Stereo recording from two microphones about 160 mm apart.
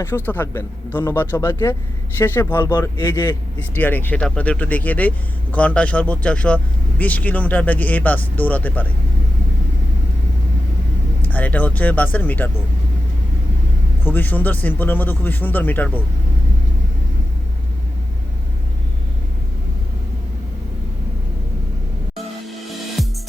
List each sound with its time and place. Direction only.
0.0 s a man's voice: 15° left (ahead or behind)
3.0 s speech: 25° left (ahead or behind)
3.8 s a man's voice: 10° left (ahead or behind)
11.2 s a man's voice: 10° left (ahead or behind)
14.0 s a man's voice: 10° left (ahead or behind)
23.0 s music: centre (ahead or behind)